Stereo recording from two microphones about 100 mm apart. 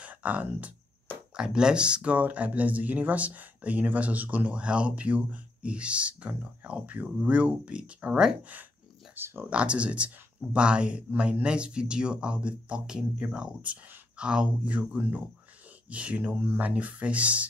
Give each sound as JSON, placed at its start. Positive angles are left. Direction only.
{"t": 0.0, "sound": "speech", "side_deg": -15}